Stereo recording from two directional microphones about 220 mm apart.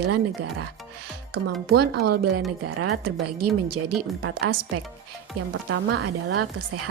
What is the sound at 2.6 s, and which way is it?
Speech, 90° right.